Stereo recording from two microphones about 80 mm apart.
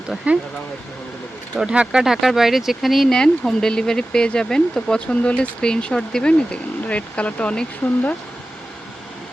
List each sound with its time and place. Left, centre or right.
0.3 s speech: centre
1.5 s speech: centre